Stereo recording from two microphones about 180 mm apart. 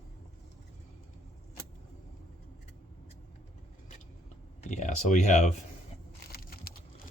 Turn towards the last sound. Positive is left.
turn(degrees=55)  # may be behind; listen again after turning